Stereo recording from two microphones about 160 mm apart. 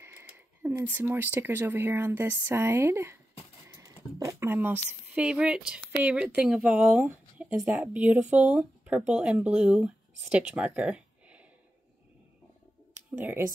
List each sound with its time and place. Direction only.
0.0 s speech: 15° right (ahead or behind)
3.6 s a sound: 20° right (ahead or behind)
4.2 s speech: 15° right (ahead or behind)
13.1 s speech: 10° right (ahead or behind)